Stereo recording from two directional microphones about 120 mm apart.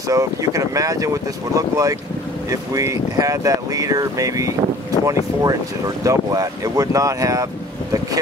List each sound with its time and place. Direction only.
0.1 s speech: 25° right (ahead or behind)